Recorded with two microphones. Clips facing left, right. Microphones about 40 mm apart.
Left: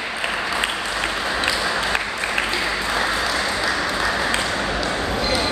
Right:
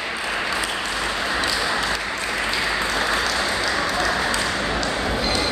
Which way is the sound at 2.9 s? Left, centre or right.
Centre.